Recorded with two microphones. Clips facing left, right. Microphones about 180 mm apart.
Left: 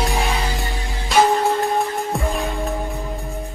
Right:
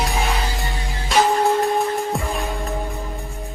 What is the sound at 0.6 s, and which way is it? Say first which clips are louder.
Music: even; centre (ahead or behind).